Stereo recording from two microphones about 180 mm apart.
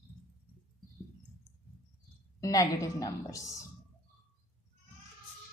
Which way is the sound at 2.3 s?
20° left (ahead or behind).